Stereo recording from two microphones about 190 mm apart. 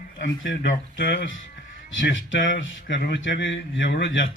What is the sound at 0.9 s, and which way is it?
Speech, 65° left (ahead or behind).